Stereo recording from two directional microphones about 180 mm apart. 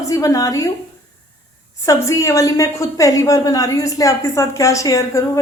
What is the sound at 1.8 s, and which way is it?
A woman's voice, 15° left (ahead or behind).